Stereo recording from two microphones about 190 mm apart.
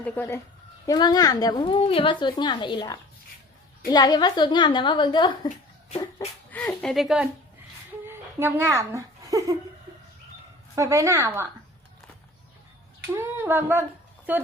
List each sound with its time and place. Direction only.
0.0 s speech: 10° left (ahead or behind)
0.9 s a woman's voice: 20° left (ahead or behind)
6.5 s a woman's voice: 10° left (ahead or behind); by 9.6 s 15° right (ahead or behind)
10.8 s a woman's voice: 15° right (ahead or behind)
13.1 s a woman's voice: 10° right (ahead or behind)